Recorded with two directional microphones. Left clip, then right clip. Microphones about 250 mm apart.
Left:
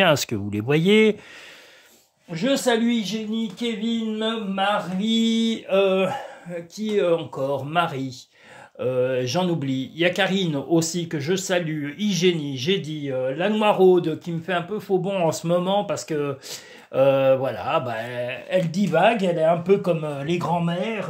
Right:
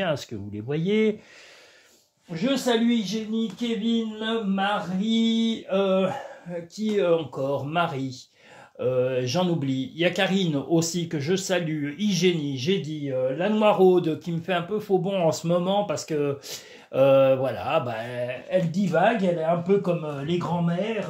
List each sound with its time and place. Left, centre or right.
0.0 s mantra: left
2.4 s mantra: left
6.5 s speech: centre; by 20.7 s left